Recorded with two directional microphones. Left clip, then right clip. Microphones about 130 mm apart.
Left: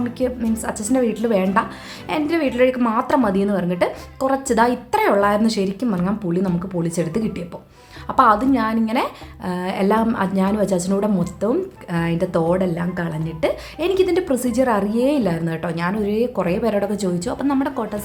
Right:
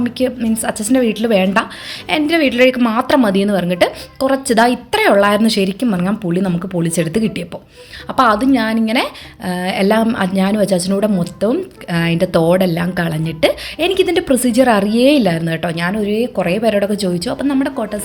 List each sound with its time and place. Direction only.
0.0 s speech: 25° right (ahead or behind); by 17.8 s 10° right (ahead or behind)